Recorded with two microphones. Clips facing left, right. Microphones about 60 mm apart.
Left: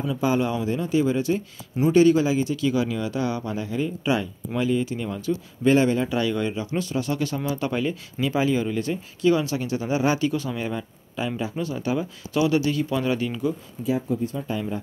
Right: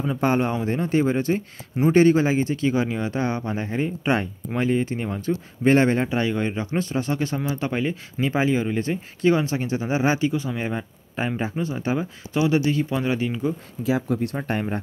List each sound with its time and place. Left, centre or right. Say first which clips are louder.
0.2 s speech: right 1 dB; right
5.3 s speech: right 1 dB; right
6.0 s speech: right 1 dB; right
13.8 s speech: right 2 dB; right
14.3 s speech: right 2 dB; right